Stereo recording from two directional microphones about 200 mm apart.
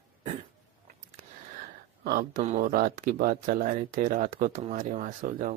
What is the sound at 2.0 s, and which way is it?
Speech, 50° right (ahead or behind).